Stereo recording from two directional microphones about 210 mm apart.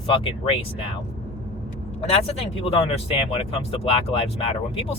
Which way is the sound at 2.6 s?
25° left (ahead or behind).